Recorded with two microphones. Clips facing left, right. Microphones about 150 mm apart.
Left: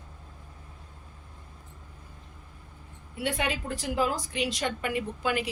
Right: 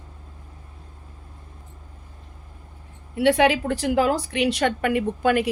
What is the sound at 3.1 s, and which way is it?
A woman's voice, 75° right (ahead or behind).